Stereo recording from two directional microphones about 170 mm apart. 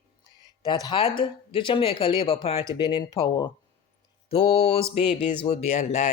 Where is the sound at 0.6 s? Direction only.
25° left (ahead or behind).